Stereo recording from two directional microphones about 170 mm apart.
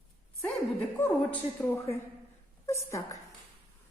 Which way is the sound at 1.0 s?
10° left (ahead or behind).